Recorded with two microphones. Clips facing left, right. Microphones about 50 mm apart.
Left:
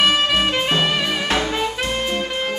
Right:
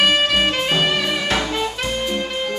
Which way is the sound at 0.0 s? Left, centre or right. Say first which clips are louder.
Right 1 dB; centre.